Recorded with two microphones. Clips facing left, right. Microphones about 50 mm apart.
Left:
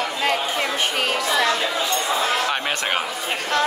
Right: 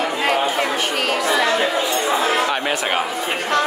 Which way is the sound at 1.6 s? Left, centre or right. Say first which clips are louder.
Right 4 dB; right.